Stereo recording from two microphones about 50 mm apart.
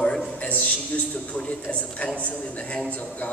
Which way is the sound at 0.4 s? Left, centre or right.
Left.